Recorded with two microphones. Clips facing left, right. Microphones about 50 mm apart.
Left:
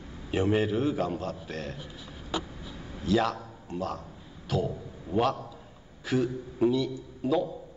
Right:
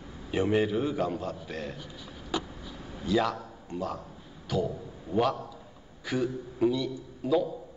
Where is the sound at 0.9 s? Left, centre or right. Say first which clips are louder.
Even; left.